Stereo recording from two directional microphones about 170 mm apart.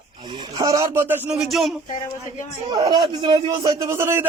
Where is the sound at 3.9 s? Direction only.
15° right (ahead or behind).